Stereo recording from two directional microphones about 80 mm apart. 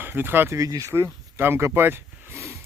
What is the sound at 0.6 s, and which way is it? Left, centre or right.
Speech, right.